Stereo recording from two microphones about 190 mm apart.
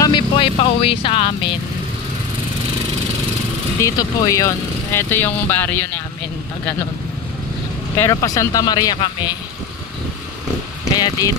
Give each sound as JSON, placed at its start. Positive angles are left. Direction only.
{"t": 0.0, "sound": "speech", "side_deg": 25}
{"t": 3.8, "sound": "speech", "side_deg": 15}
{"t": 8.0, "sound": "speech", "side_deg": 15}
{"t": 11.0, "sound": "speech", "side_deg": 15}